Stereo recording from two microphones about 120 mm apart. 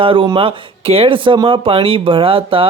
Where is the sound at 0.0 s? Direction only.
45° right (ahead or behind).